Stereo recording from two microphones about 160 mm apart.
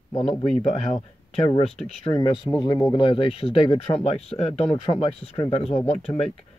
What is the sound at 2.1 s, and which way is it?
Speech, 30° left (ahead or behind).